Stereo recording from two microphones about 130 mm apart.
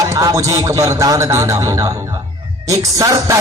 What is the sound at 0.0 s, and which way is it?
A man's voice, 25° right (ahead or behind).